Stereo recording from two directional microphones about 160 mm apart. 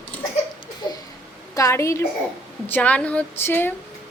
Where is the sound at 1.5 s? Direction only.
20° left (ahead or behind).